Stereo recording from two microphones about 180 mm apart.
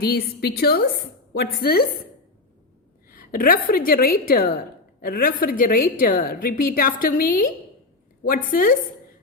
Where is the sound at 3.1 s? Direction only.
55° left (ahead or behind).